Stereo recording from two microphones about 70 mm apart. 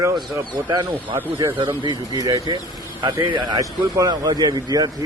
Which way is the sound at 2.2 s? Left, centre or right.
Right.